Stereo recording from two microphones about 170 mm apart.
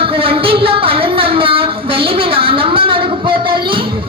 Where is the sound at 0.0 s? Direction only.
35° right (ahead or behind).